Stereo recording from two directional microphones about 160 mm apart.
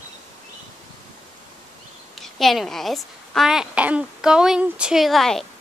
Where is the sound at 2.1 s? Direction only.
Centre (ahead or behind).